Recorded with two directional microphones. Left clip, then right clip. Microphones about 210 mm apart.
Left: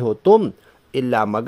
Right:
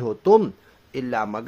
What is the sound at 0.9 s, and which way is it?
Speech, 40° left (ahead or behind).